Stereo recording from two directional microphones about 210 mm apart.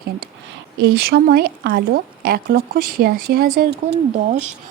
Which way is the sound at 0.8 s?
50° right (ahead or behind).